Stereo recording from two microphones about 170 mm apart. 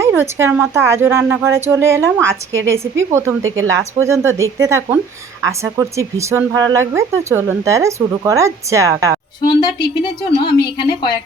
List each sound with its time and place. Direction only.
0.0 s speech: 15° right (ahead or behind)
9.5 s a woman's voice: 25° left (ahead or behind)